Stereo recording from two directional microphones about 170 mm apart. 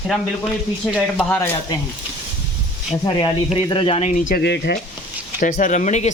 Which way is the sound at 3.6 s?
30° left (ahead or behind).